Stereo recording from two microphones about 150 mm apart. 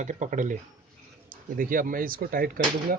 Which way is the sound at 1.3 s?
70° right (ahead or behind).